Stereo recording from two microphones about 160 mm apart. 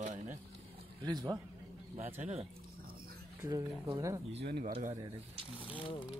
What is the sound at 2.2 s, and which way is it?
Speech, 40° right (ahead or behind).